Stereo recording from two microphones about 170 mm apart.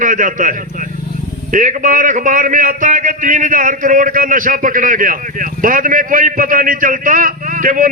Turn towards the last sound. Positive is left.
turn(degrees=-55)  # may be behind; listen again after turning